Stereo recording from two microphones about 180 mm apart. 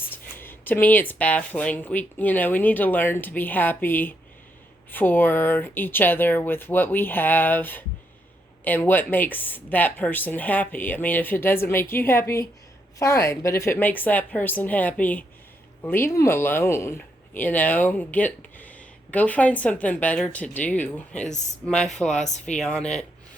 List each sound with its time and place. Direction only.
0.3 s speech: 10° left (ahead or behind)
22.2 s speech: 40° left (ahead or behind)
22.5 s speech: 5° left (ahead or behind)